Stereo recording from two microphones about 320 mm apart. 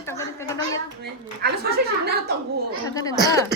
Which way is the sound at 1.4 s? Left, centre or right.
Right.